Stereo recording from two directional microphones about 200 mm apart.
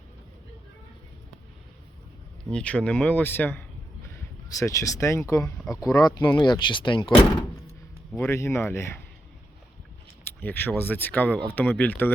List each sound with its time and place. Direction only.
2.5 s speech: 5° left (ahead or behind); by 7.1 s 25° left (ahead or behind)
8.3 s speech: 15° left (ahead or behind)
10.2 s speech: 10° left (ahead or behind)